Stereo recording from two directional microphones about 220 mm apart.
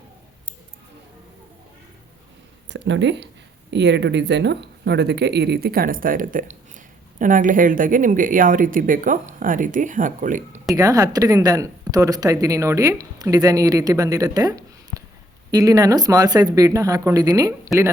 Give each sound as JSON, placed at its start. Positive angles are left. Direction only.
{"t": 2.6, "sound": "speech", "side_deg": -55}
{"t": 10.8, "sound": "a woman's voice", "side_deg": -15}